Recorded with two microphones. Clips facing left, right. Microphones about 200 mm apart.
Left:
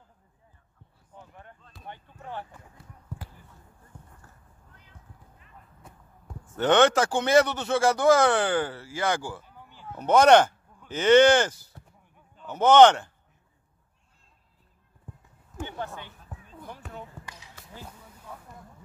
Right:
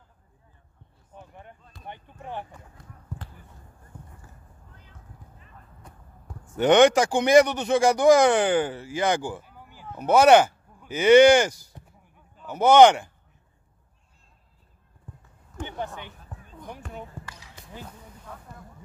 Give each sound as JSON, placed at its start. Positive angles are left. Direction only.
{"t": 1.1, "sound": "a sound", "side_deg": -20}
{"t": 1.9, "sound": "basketball bounce", "side_deg": -15}
{"t": 3.2, "sound": "basketball bounce", "side_deg": 10}
{"t": 5.8, "sound": "basketball bounce", "side_deg": 5}
{"t": 6.5, "sound": "speech", "side_deg": -15}
{"t": 9.5, "sound": "a sound", "side_deg": -10}
{"t": 9.9, "sound": "speech", "side_deg": -10}
{"t": 16.8, "sound": "basketball bounce", "side_deg": 0}